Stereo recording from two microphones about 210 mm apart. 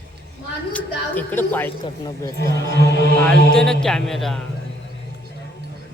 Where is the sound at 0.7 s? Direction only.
10° left (ahead or behind).